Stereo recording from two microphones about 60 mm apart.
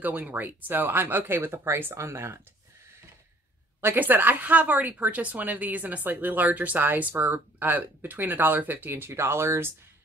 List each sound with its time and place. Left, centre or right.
0.0 s a woman's voice: right
3.8 s a woman's voice: right